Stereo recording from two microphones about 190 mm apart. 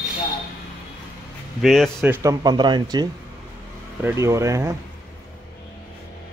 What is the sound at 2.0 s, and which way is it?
Speech, 15° right (ahead or behind).